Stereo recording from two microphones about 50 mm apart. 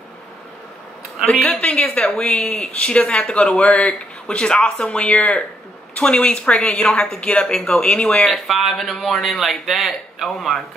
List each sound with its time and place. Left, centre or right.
1.4 s speech: left
8.3 s a man's voice: centre